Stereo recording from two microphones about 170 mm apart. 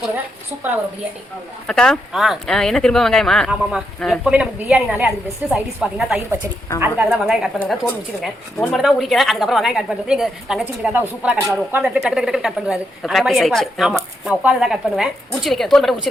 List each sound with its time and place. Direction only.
1.6 s speech: 5° left (ahead or behind)